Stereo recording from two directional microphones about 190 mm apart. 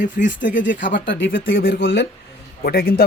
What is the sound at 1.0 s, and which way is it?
Speech, 70° left (ahead or behind).